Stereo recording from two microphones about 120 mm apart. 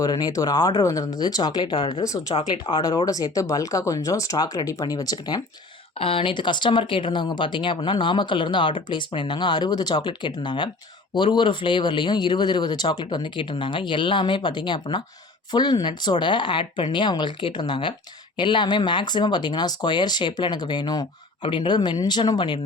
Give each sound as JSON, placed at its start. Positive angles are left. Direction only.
{"t": 0.0, "sound": "speech", "side_deg": 30}
{"t": 6.0, "sound": "speech", "side_deg": 50}